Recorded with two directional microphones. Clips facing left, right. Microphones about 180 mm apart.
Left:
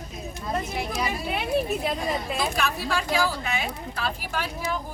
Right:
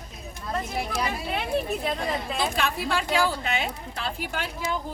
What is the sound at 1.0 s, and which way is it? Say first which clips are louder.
Speech: left 1 dB; 10° left (ahead or behind).